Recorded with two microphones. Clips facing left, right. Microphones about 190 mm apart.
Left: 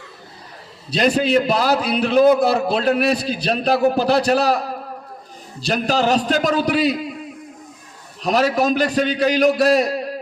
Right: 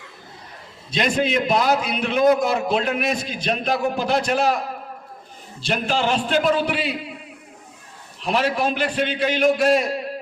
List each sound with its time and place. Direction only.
0.9 s a man's voice: 35° left (ahead or behind)
8.2 s a man's voice: 40° left (ahead or behind)